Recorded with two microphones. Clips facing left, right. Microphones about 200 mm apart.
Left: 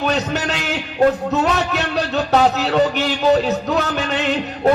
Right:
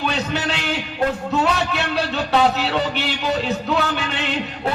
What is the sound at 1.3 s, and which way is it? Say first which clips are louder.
A man's voice: left 2 dB; 40° left (ahead or behind).